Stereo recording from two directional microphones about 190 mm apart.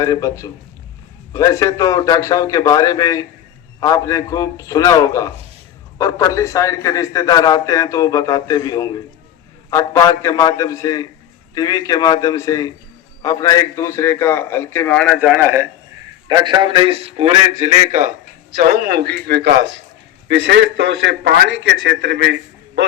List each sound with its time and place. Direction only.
0.0 s a man's voice: 20° left (ahead or behind); by 18.1 s 35° right (ahead or behind)
18.5 s a man's voice: 50° right (ahead or behind)